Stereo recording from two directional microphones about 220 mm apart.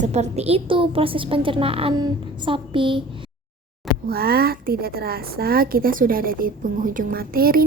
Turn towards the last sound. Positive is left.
turn(degrees=-40)  # may be behind; listen again after turning